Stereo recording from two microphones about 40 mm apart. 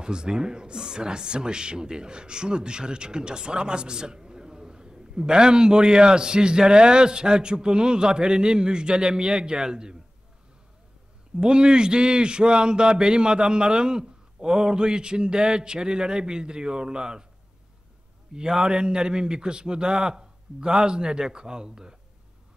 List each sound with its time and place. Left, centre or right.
0.0 s speech: centre
11.3 s speech: right
18.3 s speech: centre